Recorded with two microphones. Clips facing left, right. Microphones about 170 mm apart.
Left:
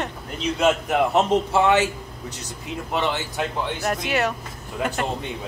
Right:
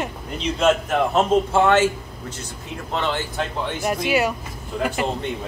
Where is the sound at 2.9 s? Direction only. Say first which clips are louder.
Even; 15° left (ahead or behind).